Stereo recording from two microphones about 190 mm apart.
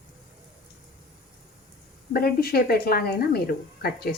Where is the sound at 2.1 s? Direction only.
50° left (ahead or behind).